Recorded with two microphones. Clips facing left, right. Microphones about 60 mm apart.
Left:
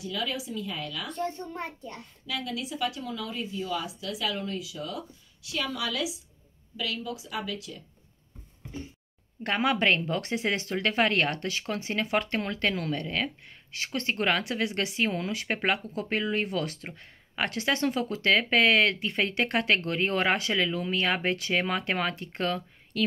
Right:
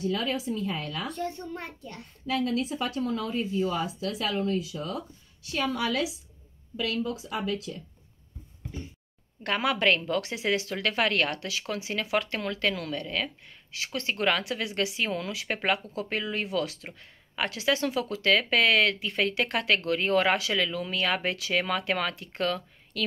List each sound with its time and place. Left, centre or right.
0.0 s speech: right
1.1 s speech: left
2.2 s speech: right
9.4 s speech: left
11.3 s speech: left